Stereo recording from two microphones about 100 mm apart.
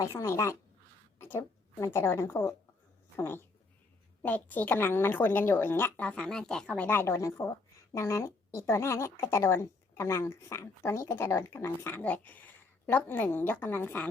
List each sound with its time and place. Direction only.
0.0 s speech: 30° left (ahead or behind)
6.1 s speech: 10° left (ahead or behind)